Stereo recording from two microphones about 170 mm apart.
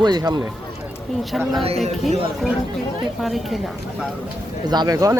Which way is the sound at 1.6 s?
40° right (ahead or behind).